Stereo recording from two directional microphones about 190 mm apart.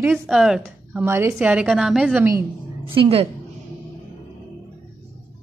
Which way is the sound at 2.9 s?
30° right (ahead or behind).